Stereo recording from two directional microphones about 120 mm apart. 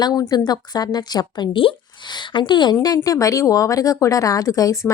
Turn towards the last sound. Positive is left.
turn(degrees=25)  # may be behind; listen again after turning